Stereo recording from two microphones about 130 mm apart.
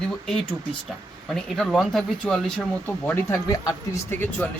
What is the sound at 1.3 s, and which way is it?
Speech, centre (ahead or behind).